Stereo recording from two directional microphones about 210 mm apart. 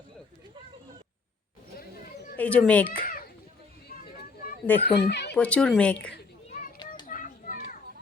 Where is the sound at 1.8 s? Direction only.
45° left (ahead or behind).